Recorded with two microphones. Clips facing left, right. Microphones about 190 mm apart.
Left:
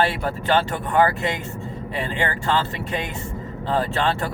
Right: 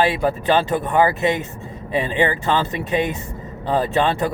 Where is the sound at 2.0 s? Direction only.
20° right (ahead or behind).